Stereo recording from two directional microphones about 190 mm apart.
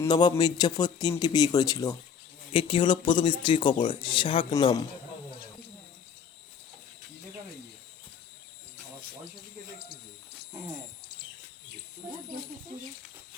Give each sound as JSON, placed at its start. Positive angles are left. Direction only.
{"t": 0.0, "sound": "speech", "side_deg": 20}
{"t": 2.5, "sound": "speech", "side_deg": 30}
{"t": 12.0, "sound": "a sound", "side_deg": -15}